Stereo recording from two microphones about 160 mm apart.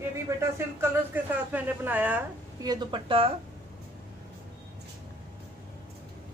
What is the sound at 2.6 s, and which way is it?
Speech, 25° right (ahead or behind).